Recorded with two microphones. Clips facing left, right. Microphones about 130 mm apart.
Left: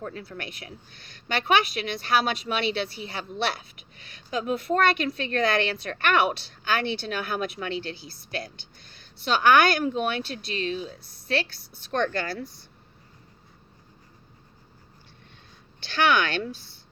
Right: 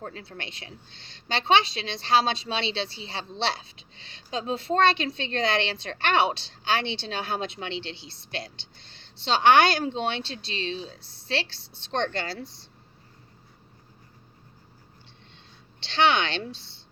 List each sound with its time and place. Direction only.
0.1 s a woman's voice: 25° right (ahead or behind)
15.8 s speech: 25° right (ahead or behind)